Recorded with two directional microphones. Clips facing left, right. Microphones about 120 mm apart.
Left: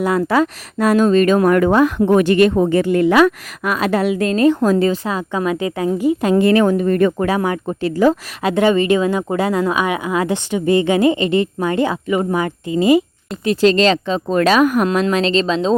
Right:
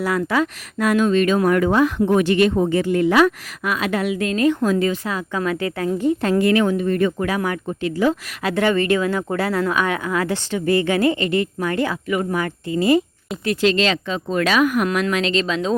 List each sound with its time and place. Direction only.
0.0 s speech: 30° left (ahead or behind); by 2.6 s 50° left (ahead or behind)
2.6 s speech: 60° left (ahead or behind)
3.6 s a woman's voice: 40° left (ahead or behind); by 6.3 s 15° left (ahead or behind)
6.3 s speech: 25° left (ahead or behind)
6.6 s speech: 45° left (ahead or behind)
7.3 s speech: 25° left (ahead or behind)
7.7 s a woman's voice: 40° left (ahead or behind)
8.4 s speech: 20° left (ahead or behind)
13.6 s a woman's voice: 35° left (ahead or behind)
14.8 s a woman's voice: 30° left (ahead or behind)